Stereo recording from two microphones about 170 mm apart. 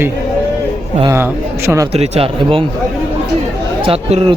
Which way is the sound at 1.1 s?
15° right (ahead or behind).